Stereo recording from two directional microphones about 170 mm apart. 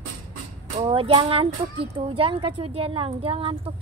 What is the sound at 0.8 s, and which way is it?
A woman's voice, 30° right (ahead or behind).